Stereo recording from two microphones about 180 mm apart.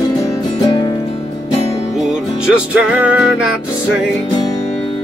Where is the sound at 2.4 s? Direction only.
5° right (ahead or behind).